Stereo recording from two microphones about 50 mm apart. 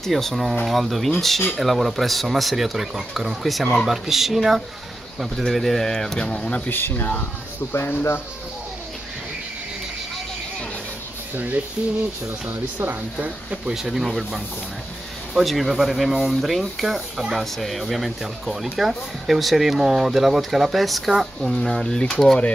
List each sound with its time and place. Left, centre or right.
0.0 s speech: centre; by 6.7 s left
6.7 s speech: left
7.7 s speech: left
11.3 s speech: right
13.2 s speech: right
13.7 s speech: centre
15.3 s speech: centre
21.4 s speech: centre